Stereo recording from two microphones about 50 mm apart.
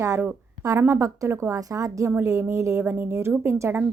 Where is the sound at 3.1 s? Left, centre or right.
Right.